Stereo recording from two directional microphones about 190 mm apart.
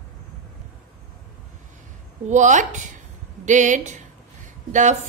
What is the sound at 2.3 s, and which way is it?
A woman's voice, 40° right (ahead or behind).